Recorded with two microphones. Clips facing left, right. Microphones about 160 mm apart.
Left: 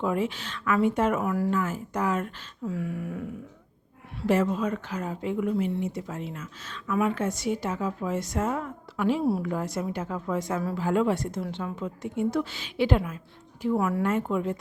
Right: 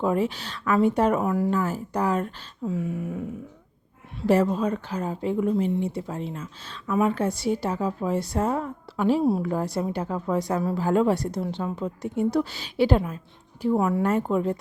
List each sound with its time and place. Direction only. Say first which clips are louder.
0.0 s a woman's voice: right 3 dB; 35° right (ahead or behind)
1.2 s a woman's voice: right 3 dB; 25° right (ahead or behind)
2.6 s a sound: right 3 dB; 20° right (ahead or behind)
4.3 s a woman's voice: right 3 dB; 35° right (ahead or behind)